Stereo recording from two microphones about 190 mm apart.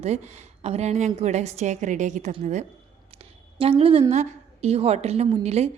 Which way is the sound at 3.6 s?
30° right (ahead or behind).